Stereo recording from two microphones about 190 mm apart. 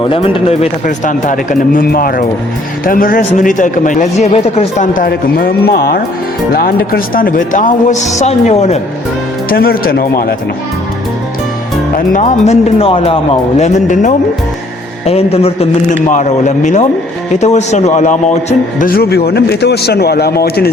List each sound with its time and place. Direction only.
0.1 s speech: 30° left (ahead or behind)
9.5 s speech: 50° left (ahead or behind)
11.9 s a man's voice: 40° left (ahead or behind)